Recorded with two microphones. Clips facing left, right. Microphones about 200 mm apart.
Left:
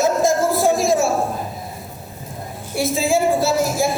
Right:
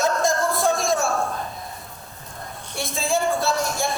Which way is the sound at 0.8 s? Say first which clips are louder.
Left 5 dB; centre (ahead or behind).